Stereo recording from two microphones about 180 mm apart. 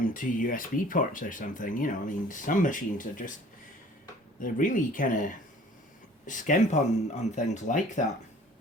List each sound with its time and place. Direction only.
0.0 s speech: 50° left (ahead or behind)
4.4 s speech: 45° left (ahead or behind)